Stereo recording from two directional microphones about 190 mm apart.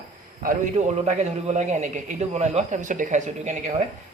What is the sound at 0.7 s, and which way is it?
A man's voice, 35° right (ahead or behind).